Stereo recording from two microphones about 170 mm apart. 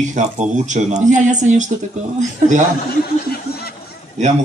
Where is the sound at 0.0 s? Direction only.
45° right (ahead or behind).